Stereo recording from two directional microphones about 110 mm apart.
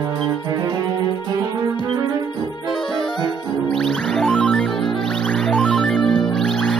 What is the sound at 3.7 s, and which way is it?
Music, 5° left (ahead or behind).